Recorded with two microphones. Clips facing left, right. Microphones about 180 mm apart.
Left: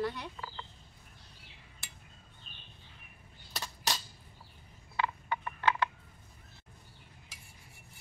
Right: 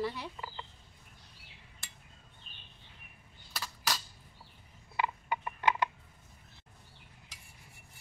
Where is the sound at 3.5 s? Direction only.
25° left (ahead or behind).